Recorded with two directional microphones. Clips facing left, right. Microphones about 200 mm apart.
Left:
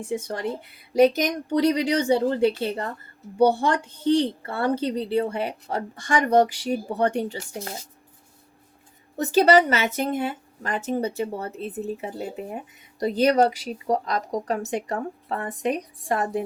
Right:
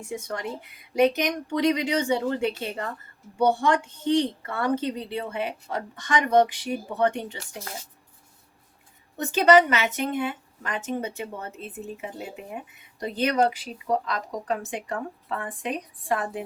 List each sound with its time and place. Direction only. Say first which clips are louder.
0.0 s a woman's voice: left 4 dB; 30° left (ahead or behind)
9.1 s a woman's voice: left 1 dB; 40° left (ahead or behind)